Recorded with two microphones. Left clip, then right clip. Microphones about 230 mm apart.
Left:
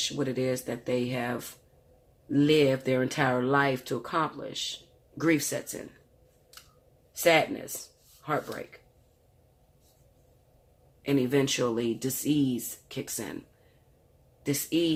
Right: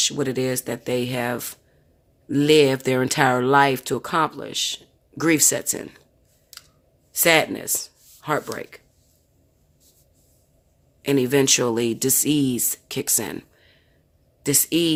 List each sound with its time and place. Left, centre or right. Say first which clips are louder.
0.0 s speech: right 7 dB; right
7.1 s speech: right 5 dB; right
11.0 s speech: right 7 dB; right
14.4 s speech: right 7 dB; right